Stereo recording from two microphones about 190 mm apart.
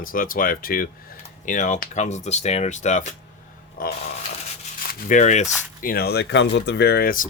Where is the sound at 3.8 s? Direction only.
50° left (ahead or behind).